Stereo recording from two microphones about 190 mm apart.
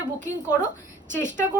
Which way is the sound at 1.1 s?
40° right (ahead or behind).